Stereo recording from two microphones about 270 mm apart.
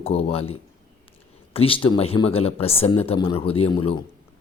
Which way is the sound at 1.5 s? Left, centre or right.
Centre.